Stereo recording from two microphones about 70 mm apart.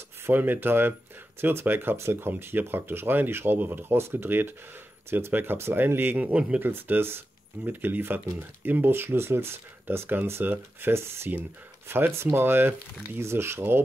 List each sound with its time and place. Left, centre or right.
0.3 s speech: right
6.7 s speech: right